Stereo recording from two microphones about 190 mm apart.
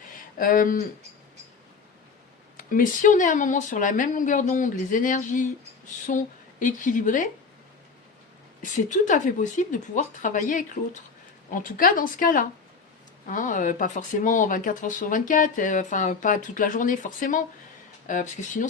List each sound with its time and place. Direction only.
0.3 s speech: 45° left (ahead or behind)
2.6 s speech: 45° left (ahead or behind)
8.6 s speech: 40° left (ahead or behind)